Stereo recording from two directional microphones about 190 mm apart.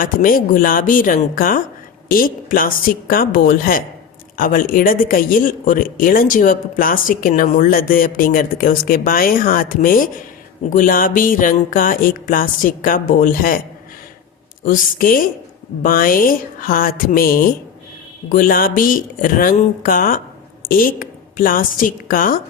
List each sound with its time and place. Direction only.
0.0 s speech: 45° left (ahead or behind)
14.6 s a woman's voice: 45° left (ahead or behind)